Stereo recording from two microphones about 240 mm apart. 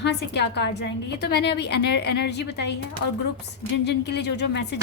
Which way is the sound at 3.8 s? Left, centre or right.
Left.